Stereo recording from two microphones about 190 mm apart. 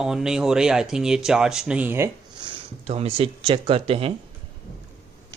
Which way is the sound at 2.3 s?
30° right (ahead or behind).